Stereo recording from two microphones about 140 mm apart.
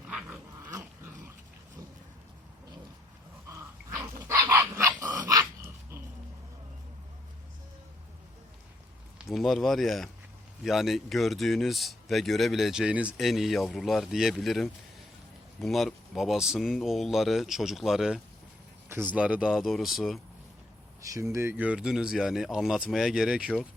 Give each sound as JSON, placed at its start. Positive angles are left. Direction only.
{"t": 0.1, "sound": "dog", "side_deg": -10}
{"t": 3.5, "sound": "dog", "side_deg": -20}
{"t": 9.1, "sound": "speech", "side_deg": 0}
{"t": 18.9, "sound": "speech", "side_deg": -15}
{"t": 21.0, "sound": "speech", "side_deg": -20}